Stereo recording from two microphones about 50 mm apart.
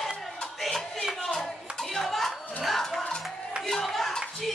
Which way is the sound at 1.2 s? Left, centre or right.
Centre.